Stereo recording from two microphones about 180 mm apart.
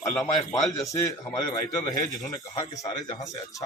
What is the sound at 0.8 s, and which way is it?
Speech, 20° left (ahead or behind).